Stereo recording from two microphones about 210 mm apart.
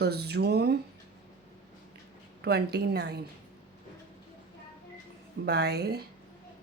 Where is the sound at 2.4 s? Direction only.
50° right (ahead or behind).